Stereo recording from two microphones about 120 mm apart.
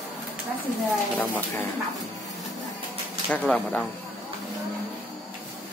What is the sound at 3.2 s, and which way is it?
Speech, 10° left (ahead or behind).